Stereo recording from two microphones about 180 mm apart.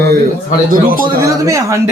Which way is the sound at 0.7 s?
50° right (ahead or behind).